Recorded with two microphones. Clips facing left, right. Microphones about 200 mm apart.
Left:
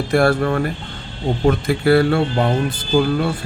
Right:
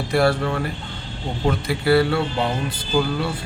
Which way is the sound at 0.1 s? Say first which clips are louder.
Left 3 dB; 50° left (ahead or behind).